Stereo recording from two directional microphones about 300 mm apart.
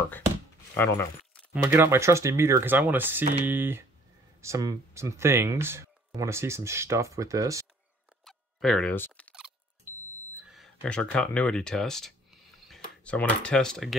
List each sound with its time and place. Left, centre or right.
0.7 s speech: centre
1.5 s speech: centre
8.2 s a sound: centre
10.3 s speech: centre